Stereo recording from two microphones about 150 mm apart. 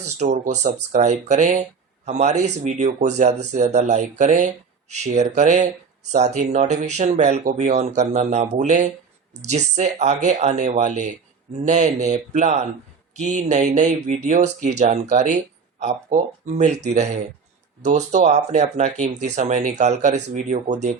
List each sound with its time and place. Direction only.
0.2 s speech: 50° right (ahead or behind)